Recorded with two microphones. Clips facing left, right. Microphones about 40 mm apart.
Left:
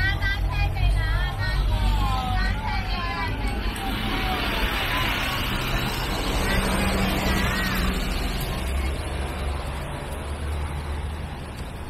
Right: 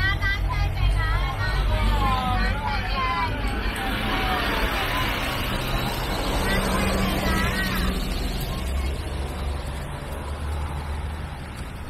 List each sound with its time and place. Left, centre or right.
0.0 s vehicle: centre
1.7 s vehicle: right
2.6 s vehicle: centre
3.0 s vehicle: centre